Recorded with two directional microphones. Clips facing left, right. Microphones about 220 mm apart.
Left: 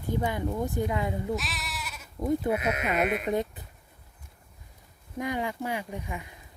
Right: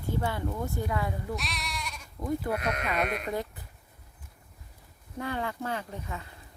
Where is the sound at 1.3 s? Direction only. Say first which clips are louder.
Left 2 dB; centre (ahead or behind).